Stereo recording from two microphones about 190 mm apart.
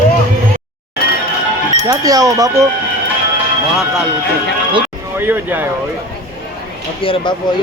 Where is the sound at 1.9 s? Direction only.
20° right (ahead or behind).